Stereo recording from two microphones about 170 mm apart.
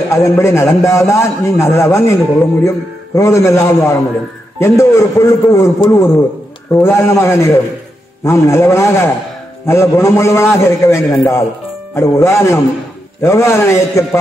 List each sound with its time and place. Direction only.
0.1 s a man's voice: 15° left (ahead or behind)